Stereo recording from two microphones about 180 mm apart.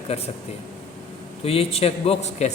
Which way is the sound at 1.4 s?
35° left (ahead or behind).